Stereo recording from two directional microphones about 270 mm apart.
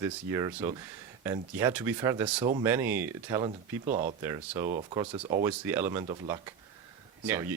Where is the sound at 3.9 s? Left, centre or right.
Right.